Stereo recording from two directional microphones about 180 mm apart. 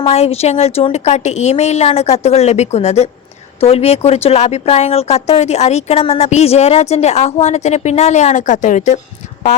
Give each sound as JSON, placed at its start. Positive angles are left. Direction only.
{"t": 0.1, "sound": "a woman's voice", "side_deg": 35}